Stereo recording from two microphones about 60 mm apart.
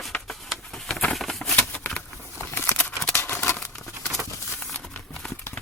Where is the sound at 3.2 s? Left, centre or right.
Left.